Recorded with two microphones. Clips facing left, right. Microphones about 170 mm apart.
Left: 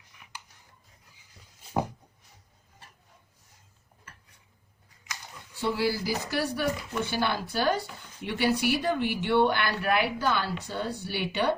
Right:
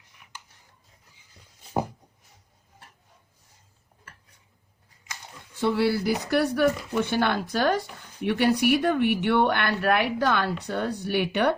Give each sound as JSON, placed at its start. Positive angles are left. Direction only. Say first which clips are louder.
{"t": 5.5, "sound": "speech", "louder": "right 5 dB", "side_deg": -55}